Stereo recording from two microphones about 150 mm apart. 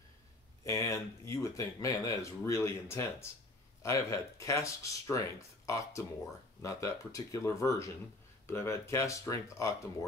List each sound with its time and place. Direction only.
0.7 s speech: 20° left (ahead or behind)